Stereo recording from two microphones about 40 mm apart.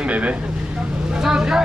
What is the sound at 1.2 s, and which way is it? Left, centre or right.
Speech, centre.